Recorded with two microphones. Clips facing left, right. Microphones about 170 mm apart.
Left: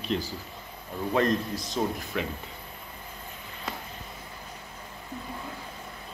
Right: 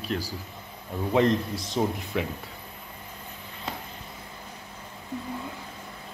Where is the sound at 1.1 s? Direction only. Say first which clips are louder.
Right 3 dB; 20° right (ahead or behind).